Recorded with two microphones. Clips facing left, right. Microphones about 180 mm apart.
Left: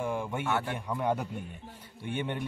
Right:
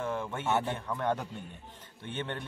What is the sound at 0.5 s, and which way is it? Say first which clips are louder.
Speech: right 3 dB; 20° right (ahead or behind).